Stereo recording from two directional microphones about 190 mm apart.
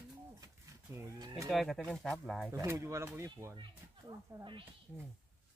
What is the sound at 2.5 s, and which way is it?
Speech, 15° right (ahead or behind).